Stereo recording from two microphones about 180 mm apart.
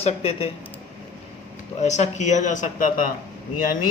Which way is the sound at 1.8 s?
40° left (ahead or behind).